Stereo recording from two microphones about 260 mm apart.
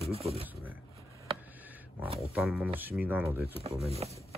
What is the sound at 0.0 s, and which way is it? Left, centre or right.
Speech, right.